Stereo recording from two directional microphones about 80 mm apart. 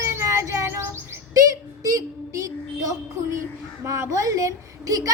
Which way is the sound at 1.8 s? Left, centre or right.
Right.